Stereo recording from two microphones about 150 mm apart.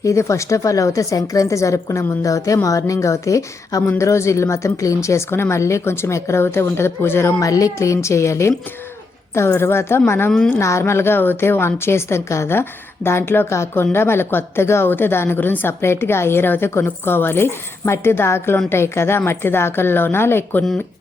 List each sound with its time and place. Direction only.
0.0 s a woman's voice: 20° left (ahead or behind)